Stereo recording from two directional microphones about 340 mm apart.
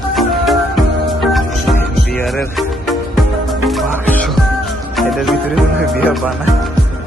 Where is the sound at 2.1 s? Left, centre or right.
Centre.